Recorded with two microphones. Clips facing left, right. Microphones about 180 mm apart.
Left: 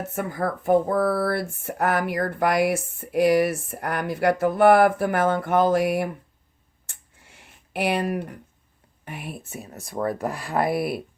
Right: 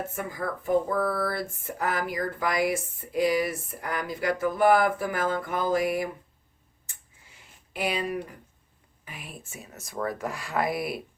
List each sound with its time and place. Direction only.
0.1 s speech: 65° left (ahead or behind)
6.8 s a sound: 70° left (ahead or behind)
9.0 s speech: 65° left (ahead or behind)
9.6 s speech: 35° left (ahead or behind)
10.3 s speech: 60° left (ahead or behind)